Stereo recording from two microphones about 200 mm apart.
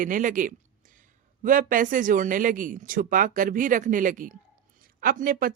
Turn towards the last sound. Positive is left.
turn(degrees=-45)  # may be behind; listen again after turning